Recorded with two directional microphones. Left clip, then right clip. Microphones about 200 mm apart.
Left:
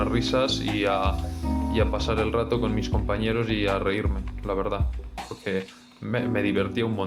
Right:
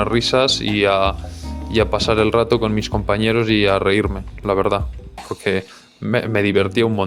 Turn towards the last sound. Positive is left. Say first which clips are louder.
# right 9 dB
turn(degrees=-45)  # may be behind; listen again after turning